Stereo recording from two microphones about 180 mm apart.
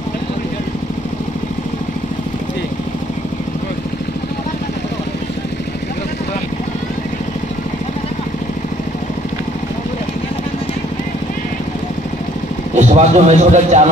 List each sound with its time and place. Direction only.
12.7 s a man's voice: 40° right (ahead or behind)